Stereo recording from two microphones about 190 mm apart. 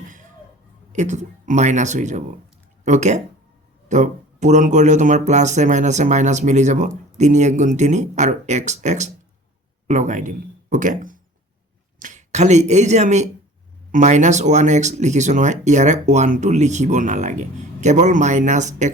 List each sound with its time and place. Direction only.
0.9 s speech: 40° right (ahead or behind)